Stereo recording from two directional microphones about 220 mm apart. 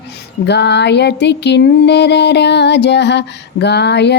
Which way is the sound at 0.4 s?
50° left (ahead or behind).